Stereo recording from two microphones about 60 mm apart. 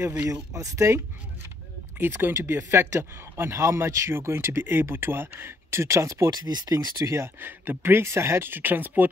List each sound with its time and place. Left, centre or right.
0.3 s speech: right
2.0 s speech: right
6.4 s speech: right
7.3 s speech: right